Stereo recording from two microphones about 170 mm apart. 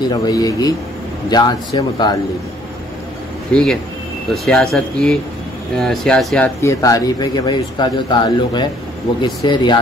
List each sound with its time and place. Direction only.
0.1 s speech: 20° left (ahead or behind)
3.5 s speech: 5° left (ahead or behind)
6.6 s speech: 20° left (ahead or behind)